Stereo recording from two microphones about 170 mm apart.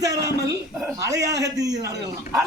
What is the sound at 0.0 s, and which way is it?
A woman's voice, 20° right (ahead or behind).